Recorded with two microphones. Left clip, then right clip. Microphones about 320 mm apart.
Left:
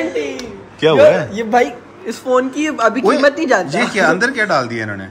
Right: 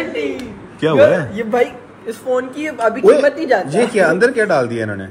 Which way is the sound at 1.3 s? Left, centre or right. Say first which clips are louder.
Left 2 dB; left.